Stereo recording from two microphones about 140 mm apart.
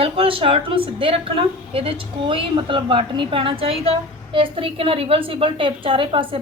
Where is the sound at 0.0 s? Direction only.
40° right (ahead or behind).